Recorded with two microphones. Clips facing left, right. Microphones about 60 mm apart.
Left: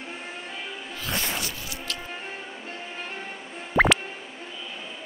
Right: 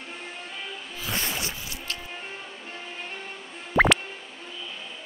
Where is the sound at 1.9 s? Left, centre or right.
Right.